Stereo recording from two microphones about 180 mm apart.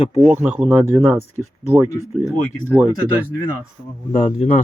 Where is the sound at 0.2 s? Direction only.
10° right (ahead or behind).